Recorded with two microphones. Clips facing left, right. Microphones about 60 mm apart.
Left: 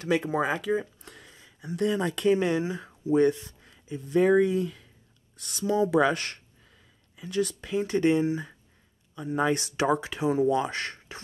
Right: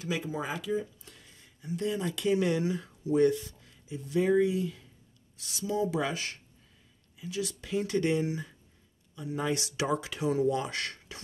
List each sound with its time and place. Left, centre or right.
0.0 s speech: left
7.4 s speech: left